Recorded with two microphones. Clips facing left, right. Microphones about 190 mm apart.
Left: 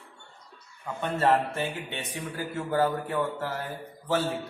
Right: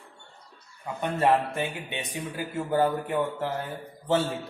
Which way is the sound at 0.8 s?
15° right (ahead or behind).